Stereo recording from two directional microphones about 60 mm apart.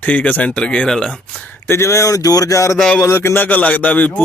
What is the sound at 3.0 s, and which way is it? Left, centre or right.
Speech, left.